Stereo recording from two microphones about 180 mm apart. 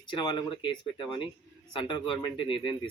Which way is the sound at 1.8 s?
25° left (ahead or behind).